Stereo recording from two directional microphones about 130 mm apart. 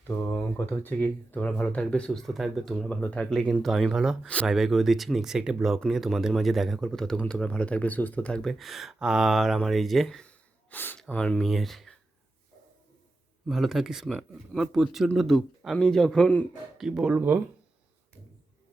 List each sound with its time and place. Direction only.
0.2 s speech: 20° left (ahead or behind); by 11.9 s centre (ahead or behind)
13.5 s speech: centre (ahead or behind)
16.7 s speech: 5° right (ahead or behind)